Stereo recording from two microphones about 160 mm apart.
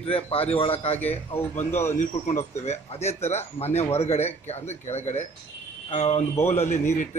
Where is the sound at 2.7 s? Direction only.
40° left (ahead or behind).